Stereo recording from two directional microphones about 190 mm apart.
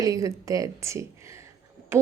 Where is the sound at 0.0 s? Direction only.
15° right (ahead or behind).